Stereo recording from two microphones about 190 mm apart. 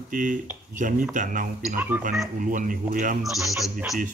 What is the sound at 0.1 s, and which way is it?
Speech, 45° right (ahead or behind).